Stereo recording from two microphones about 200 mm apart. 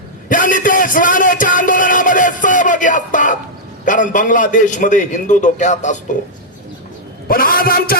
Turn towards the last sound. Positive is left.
turn(degrees=45)  # may be behind; listen again after turning